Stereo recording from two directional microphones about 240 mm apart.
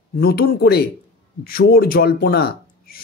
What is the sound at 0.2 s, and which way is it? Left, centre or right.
Speech, left.